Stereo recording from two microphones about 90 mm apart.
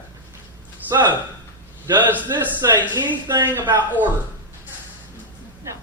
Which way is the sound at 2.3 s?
35° right (ahead or behind).